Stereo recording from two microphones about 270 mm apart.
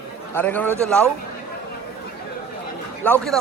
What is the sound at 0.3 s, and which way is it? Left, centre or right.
Speech, centre.